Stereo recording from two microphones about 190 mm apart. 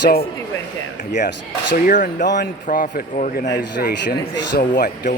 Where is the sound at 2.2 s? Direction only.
65° left (ahead or behind).